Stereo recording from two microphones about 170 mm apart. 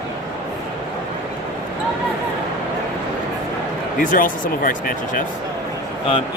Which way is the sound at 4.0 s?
50° left (ahead or behind).